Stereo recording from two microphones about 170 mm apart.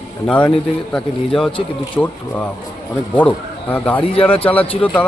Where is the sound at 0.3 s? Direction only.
5° left (ahead or behind).